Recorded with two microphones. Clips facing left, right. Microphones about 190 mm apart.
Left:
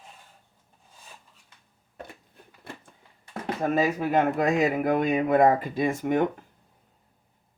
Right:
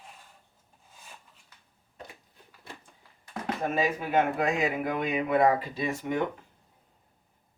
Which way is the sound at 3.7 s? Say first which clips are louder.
Left 4 dB; 40° left (ahead or behind).